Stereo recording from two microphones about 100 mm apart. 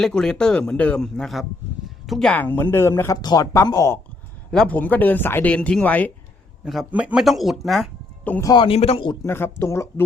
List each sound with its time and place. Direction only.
0.0 s speech: 5° left (ahead or behind)
2.3 s speech: 20° left (ahead or behind)
3.2 s speech: 40° left (ahead or behind)
4.5 s speech: 10° left (ahead or behind)
6.9 s speech: 10° right (ahead or behind)
7.3 s speech: centre (ahead or behind)
8.5 s speech: 70° left (ahead or behind)
9.2 s speech: 25° left (ahead or behind)